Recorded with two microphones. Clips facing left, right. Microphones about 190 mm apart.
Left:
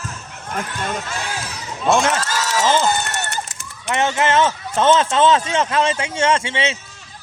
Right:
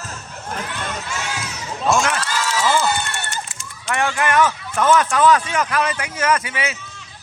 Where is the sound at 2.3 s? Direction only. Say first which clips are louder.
Left 1 dB; 45° left (ahead or behind).